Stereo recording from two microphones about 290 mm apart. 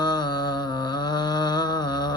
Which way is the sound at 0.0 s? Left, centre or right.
Centre.